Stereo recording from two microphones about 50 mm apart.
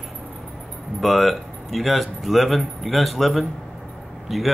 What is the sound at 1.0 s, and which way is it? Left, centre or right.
Speech, centre.